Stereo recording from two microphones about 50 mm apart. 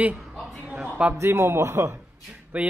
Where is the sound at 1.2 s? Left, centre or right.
Right.